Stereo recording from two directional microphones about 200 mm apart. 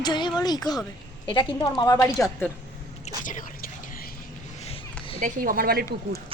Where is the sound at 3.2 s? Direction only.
40° left (ahead or behind).